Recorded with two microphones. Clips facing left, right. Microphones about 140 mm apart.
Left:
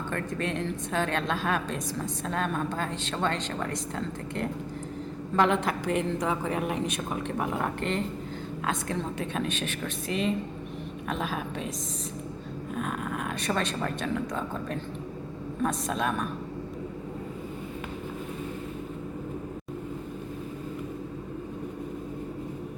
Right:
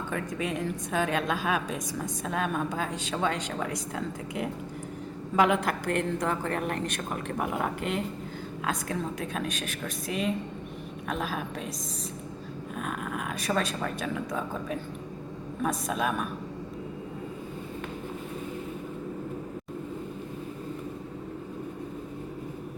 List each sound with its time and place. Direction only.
0.1 s a woman's voice: 5° right (ahead or behind)
12.7 s a woman's voice: centre (ahead or behind)